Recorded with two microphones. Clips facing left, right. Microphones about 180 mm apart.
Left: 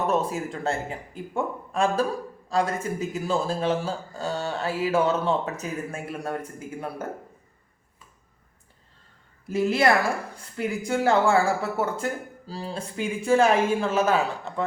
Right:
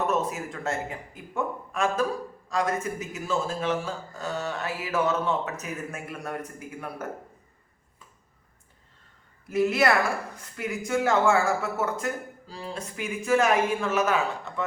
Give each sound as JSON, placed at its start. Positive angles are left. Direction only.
{"t": 0.1, "sound": "speech", "side_deg": 30}
{"t": 9.5, "sound": "a woman's voice", "side_deg": 30}